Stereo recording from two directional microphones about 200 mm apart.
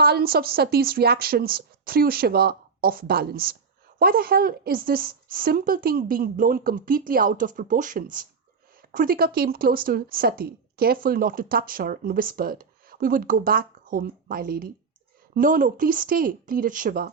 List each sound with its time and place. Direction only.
0.0 s a woman's voice: 50° right (ahead or behind)